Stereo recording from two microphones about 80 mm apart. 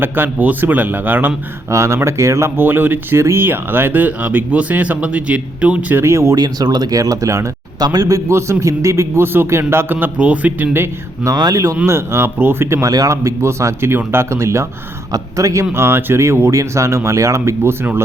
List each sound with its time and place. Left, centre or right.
0.0 s speech: right
1.7 s speech: right; by 6.0 s centre
6.0 s a man's voice: right
6.4 s a man's voice: right
11.5 s a man's voice: right
12.8 s a man's voice: right
15.7 s a man's voice: right